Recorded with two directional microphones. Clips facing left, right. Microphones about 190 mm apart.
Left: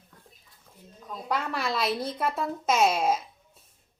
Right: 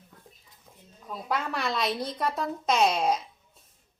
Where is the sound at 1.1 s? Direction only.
Centre (ahead or behind).